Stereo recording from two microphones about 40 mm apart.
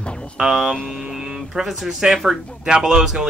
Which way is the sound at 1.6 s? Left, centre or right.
Centre.